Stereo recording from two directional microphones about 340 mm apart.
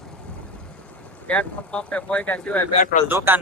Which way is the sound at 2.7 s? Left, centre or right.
Left.